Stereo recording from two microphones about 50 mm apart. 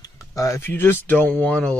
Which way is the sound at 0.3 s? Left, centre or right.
Left.